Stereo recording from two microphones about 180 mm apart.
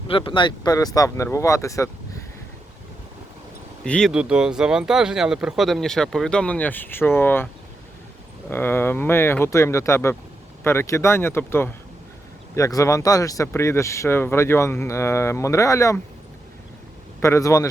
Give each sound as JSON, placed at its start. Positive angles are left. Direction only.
{"t": 0.1, "sound": "speech", "side_deg": 25}
{"t": 3.8, "sound": "speech", "side_deg": 5}
{"t": 4.1, "sound": "speech", "side_deg": -5}
{"t": 17.2, "sound": "speech", "side_deg": 15}